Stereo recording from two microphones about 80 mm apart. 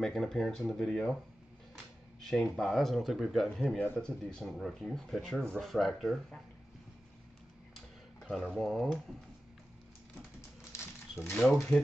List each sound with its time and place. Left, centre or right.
0.0 s speech: centre
2.2 s speech: centre
4.0 s a man's voice: centre
7.7 s a sound: centre
10.7 s a sound: left
11.3 s speech: centre